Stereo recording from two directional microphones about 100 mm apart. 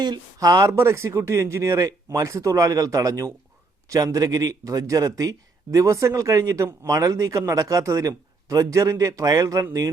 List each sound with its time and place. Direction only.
0.0 s speech: 40° right (ahead or behind)